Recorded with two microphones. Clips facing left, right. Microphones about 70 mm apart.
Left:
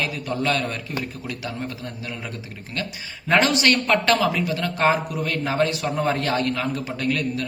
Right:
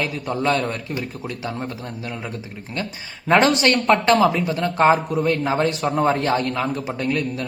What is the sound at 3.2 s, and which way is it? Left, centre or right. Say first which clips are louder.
A man's voice: right 3 dB; right.